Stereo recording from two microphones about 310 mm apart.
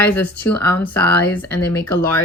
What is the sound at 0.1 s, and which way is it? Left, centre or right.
Speech, centre.